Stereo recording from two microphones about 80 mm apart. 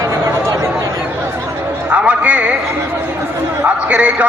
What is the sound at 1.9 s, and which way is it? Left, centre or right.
Speech, centre.